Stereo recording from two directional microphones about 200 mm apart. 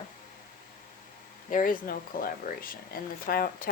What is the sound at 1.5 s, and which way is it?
Speech, 45° left (ahead or behind).